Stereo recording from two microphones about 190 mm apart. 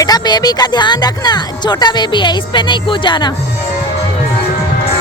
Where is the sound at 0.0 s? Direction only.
20° left (ahead or behind).